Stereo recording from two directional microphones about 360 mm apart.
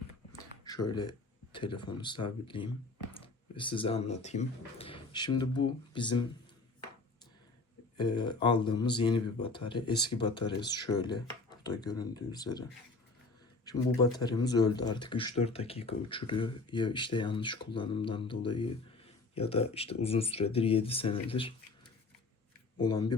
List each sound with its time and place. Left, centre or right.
0.6 s speech: centre
7.9 s speech: centre
13.7 s speech: centre
22.8 s speech: centre